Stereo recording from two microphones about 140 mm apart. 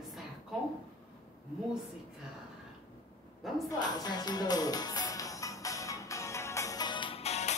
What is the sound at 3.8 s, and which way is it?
Music, 30° left (ahead or behind).